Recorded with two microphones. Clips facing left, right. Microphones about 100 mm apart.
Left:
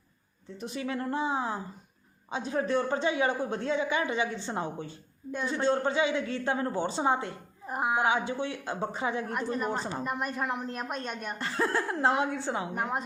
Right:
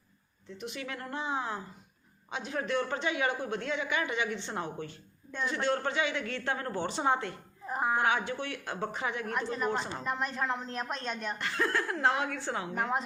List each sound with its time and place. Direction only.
0.6 s speech: 30° left (ahead or behind)
7.7 s speech: 10° left (ahead or behind)
8.0 s speech: 25° left (ahead or behind)
9.3 s a woman's voice: 5° left (ahead or behind)
11.3 s speech: 30° left (ahead or behind)
12.7 s a woman's voice: 5° left (ahead or behind)